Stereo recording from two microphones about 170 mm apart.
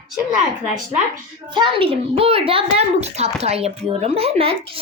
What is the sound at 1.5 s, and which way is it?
A child's voice, 30° right (ahead or behind).